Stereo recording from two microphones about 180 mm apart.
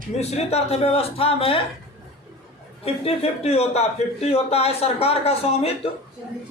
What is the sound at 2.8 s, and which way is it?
Speech, 35° left (ahead or behind).